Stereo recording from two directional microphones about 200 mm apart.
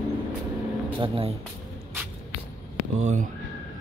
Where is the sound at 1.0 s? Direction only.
25° right (ahead or behind).